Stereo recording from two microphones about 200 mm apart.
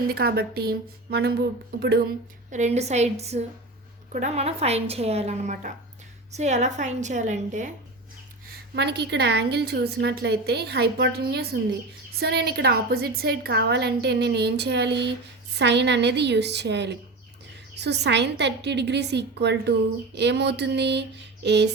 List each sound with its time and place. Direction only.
0.1 s a woman's voice: 50° right (ahead or behind)
2.5 s a woman's voice: 35° right (ahead or behind)
8.7 s a woman's voice: 55° right (ahead or behind)